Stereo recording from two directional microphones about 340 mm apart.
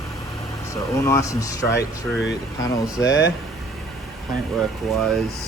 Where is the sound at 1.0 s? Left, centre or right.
Centre.